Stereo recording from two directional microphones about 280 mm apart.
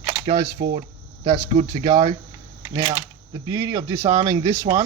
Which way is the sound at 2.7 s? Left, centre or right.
Centre.